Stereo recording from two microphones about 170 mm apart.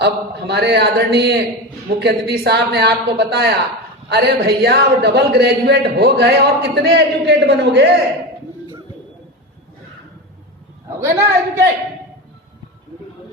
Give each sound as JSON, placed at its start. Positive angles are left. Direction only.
{"t": 0.0, "sound": "a man's voice", "side_deg": -80}
{"t": 11.0, "sound": "a man's voice", "side_deg": -15}